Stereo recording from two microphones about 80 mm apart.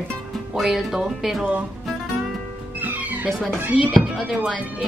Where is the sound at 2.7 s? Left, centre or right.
Right.